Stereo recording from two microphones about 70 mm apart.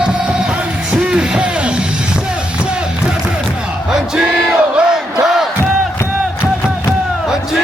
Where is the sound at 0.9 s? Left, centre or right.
Centre.